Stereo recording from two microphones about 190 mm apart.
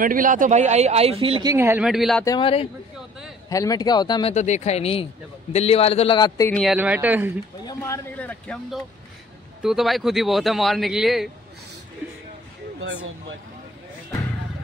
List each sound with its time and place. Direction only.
0.0 s speech: 45° right (ahead or behind); by 1.5 s 30° right (ahead or behind)
1.5 s speech: 10° right (ahead or behind)
2.2 s speech: 25° left (ahead or behind)
3.4 s a man's voice: 20° left (ahead or behind)
6.5 s a man's voice: centre (ahead or behind)
7.6 s speech: 15° left (ahead or behind); by 11.2 s centre (ahead or behind)